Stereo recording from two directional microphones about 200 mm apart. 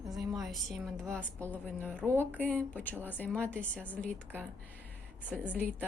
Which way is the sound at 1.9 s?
10° right (ahead or behind).